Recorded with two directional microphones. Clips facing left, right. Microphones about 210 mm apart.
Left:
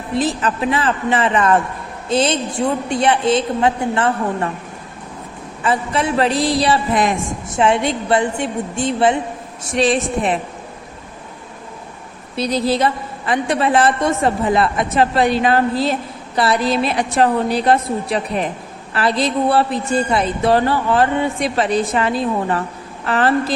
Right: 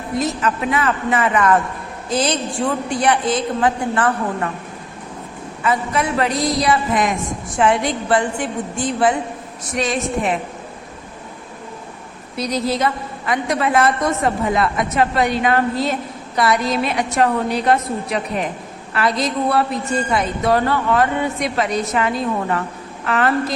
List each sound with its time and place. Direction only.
0.2 s a woman's voice: 30° left (ahead or behind)
5.6 s a woman's voice: 30° left (ahead or behind)
12.4 s a woman's voice: 30° left (ahead or behind)